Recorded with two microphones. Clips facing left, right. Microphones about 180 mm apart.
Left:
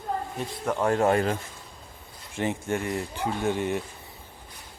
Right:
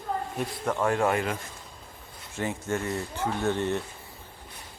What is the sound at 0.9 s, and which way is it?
Speech, 30° left (ahead or behind).